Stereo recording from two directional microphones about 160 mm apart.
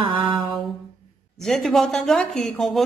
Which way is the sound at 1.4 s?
Centre (ahead or behind).